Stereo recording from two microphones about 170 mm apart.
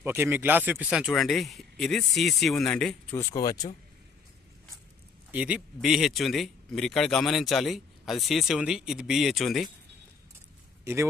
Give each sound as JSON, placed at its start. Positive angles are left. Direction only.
{"t": 0.0, "sound": "speech", "side_deg": -10}
{"t": 3.2, "sound": "speech", "side_deg": 20}
{"t": 5.3, "sound": "speech", "side_deg": -5}
{"t": 10.8, "sound": "a man's voice", "side_deg": -15}